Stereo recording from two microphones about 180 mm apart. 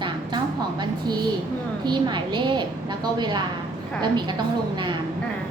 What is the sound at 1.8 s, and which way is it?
A woman's voice, 25° right (ahead or behind).